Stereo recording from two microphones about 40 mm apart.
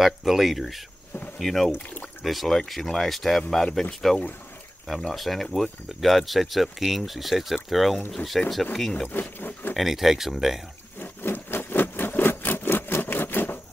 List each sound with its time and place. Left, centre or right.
0.0 s speech: centre
9.1 s speech: left
9.8 s speech: centre
11.0 s wood: left